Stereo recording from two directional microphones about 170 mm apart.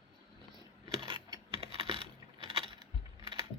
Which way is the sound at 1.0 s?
30° right (ahead or behind).